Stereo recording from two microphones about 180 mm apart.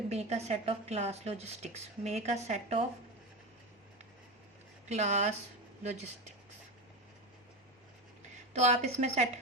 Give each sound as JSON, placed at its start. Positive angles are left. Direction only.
{"t": 0.1, "sound": "a woman's voice", "side_deg": -40}
{"t": 4.9, "sound": "a woman's voice", "side_deg": -40}
{"t": 8.5, "sound": "a woman's voice", "side_deg": -40}